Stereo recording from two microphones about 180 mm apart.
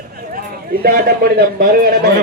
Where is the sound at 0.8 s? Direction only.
55° right (ahead or behind).